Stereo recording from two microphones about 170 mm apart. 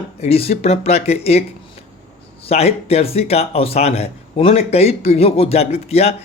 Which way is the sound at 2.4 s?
35° left (ahead or behind).